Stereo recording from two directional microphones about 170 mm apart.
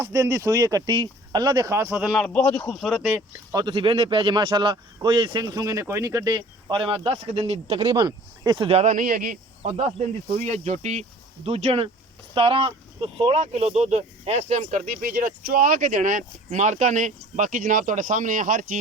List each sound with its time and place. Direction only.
0.0 s speech: 20° right (ahead or behind)
2.2 s speech: 5° left (ahead or behind)
3.5 s speech: 25° right (ahead or behind)
7.9 s speech: 25° right (ahead or behind); by 9.7 s 55° right (ahead or behind)
10.3 s speech: 40° right (ahead or behind)